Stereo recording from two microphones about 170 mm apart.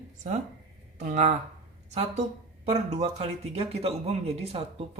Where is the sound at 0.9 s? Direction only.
45° right (ahead or behind).